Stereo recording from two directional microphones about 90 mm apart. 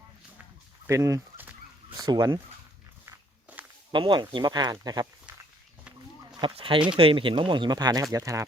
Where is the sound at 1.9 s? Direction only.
50° right (ahead or behind).